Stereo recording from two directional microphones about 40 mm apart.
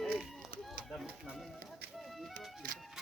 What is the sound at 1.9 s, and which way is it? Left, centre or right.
Music, centre.